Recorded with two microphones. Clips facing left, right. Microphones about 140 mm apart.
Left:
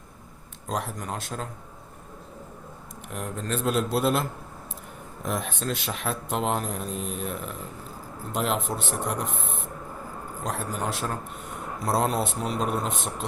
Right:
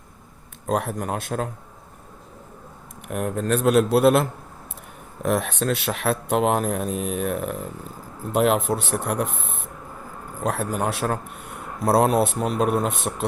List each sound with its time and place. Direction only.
0.7 s speech: 60° right (ahead or behind)
3.1 s speech: 55° right (ahead or behind)
10.4 s speech: 60° right (ahead or behind)